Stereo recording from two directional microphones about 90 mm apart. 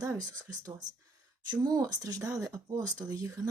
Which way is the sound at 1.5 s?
45° right (ahead or behind).